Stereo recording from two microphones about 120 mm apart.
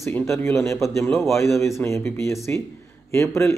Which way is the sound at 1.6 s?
20° left (ahead or behind).